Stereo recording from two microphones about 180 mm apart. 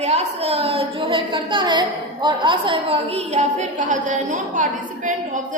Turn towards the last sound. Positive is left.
turn(degrees=-45)  # may be behind; listen again after turning